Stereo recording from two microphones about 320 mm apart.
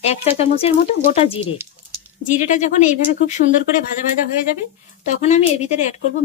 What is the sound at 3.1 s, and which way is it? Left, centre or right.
Speech, left.